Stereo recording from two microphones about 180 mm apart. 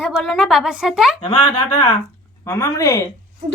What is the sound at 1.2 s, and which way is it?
Speech, 30° left (ahead or behind).